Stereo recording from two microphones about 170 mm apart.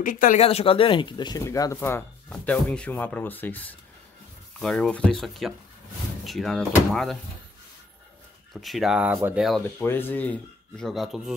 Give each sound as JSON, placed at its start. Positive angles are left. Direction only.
{"t": 0.0, "sound": "speech", "side_deg": 55}
{"t": 0.4, "sound": "speech", "side_deg": 35}
{"t": 8.5, "sound": "speech", "side_deg": 0}
{"t": 9.8, "sound": "speech", "side_deg": 10}